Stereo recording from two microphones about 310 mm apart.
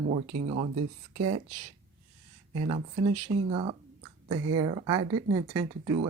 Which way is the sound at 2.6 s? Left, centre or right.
Centre.